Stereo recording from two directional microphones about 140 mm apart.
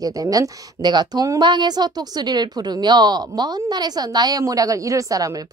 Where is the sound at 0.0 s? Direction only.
25° right (ahead or behind).